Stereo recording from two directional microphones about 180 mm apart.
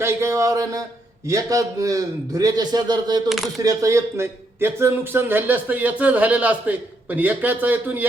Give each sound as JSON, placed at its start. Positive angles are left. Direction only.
{"t": 0.0, "sound": "a man's voice", "side_deg": -15}
{"t": 3.2, "sound": "speech", "side_deg": 0}
{"t": 3.6, "sound": "a man's voice", "side_deg": -20}